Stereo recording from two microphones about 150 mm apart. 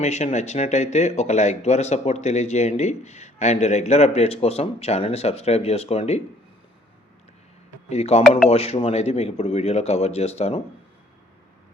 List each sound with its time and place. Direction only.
0.0 s speech: 50° left (ahead or behind)
7.9 s speech: 45° left (ahead or behind)